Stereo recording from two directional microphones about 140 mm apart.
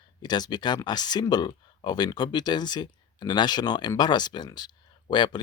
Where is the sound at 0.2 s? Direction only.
30° left (ahead or behind).